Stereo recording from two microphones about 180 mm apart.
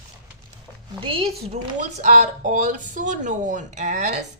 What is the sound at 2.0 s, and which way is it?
Speech, 40° right (ahead or behind).